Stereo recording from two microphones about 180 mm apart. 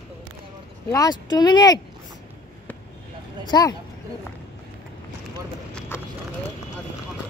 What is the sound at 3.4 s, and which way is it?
Speech, 20° left (ahead or behind).